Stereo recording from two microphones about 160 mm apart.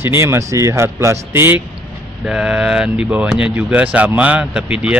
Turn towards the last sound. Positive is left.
turn(degrees=-5)  # may be behind; listen again after turning